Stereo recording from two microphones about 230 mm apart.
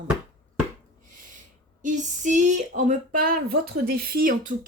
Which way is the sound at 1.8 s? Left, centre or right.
Right.